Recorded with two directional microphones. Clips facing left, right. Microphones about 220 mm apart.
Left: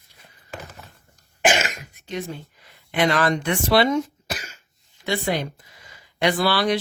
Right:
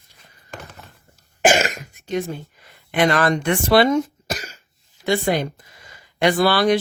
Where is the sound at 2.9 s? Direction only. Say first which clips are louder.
Right 2 dB; 50° right (ahead or behind).